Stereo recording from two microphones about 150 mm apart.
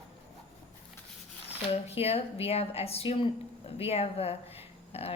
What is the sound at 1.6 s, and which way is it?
A woman's voice, 40° left (ahead or behind).